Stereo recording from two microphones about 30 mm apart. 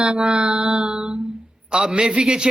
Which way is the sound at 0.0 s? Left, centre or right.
Right.